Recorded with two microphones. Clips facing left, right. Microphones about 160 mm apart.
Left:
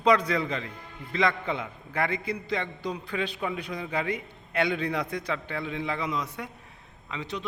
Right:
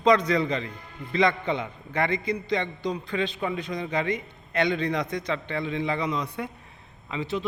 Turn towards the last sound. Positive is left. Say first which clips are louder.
# right 5 dB
turn(degrees=0)  # may be behind; listen again after turning